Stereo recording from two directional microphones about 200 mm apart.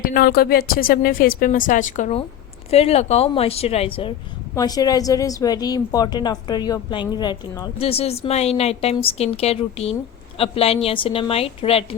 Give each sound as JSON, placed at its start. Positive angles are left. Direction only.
{"t": 0.0, "sound": "a woman's voice", "side_deg": 45}